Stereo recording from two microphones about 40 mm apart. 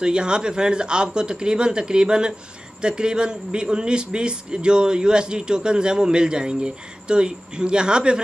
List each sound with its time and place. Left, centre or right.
0.0 s a man's voice: right